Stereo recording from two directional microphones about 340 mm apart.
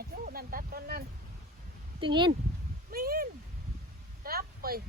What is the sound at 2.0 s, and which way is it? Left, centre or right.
Speech, centre.